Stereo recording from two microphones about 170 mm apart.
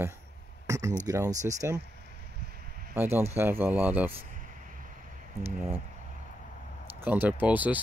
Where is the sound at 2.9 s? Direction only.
15° right (ahead or behind).